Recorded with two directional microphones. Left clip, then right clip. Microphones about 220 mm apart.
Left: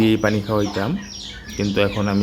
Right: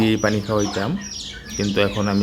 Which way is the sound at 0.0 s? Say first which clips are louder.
Left 1 dB; centre (ahead or behind).